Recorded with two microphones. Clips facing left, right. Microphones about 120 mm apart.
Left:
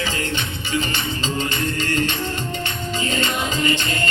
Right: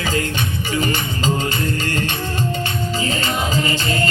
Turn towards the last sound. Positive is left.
turn(degrees=-40)  # may be behind; listen again after turning